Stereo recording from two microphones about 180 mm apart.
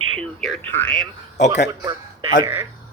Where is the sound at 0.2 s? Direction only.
5° left (ahead or behind).